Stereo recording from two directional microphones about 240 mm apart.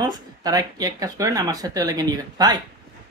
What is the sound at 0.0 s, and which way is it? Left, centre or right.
Speech, centre.